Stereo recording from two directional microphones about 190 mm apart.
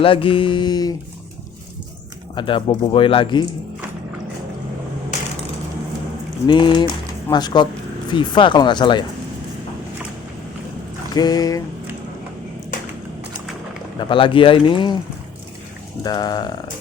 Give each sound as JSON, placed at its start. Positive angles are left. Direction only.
{"t": 0.0, "sound": "speech", "side_deg": 30}
{"t": 2.3, "sound": "speech", "side_deg": 25}
{"t": 6.5, "sound": "speech", "side_deg": 25}
{"t": 11.1, "sound": "speech", "side_deg": 20}
{"t": 14.1, "sound": "speech", "side_deg": 25}
{"t": 16.0, "sound": "speech", "side_deg": 20}